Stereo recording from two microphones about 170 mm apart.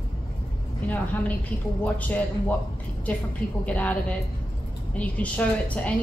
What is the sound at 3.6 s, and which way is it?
A woman's voice, 10° left (ahead or behind).